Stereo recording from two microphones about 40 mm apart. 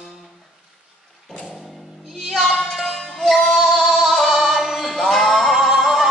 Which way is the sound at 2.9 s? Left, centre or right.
Centre.